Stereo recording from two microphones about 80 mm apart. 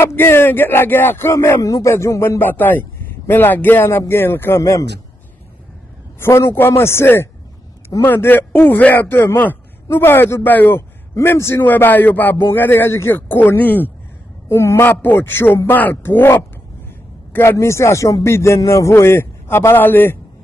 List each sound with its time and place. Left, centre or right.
0.0 s a man's voice: left
6.1 s a man's voice: left